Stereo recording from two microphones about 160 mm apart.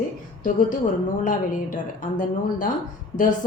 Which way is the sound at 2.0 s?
55° left (ahead or behind).